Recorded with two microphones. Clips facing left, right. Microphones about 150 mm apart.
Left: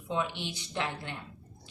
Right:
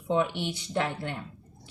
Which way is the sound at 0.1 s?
60° right (ahead or behind).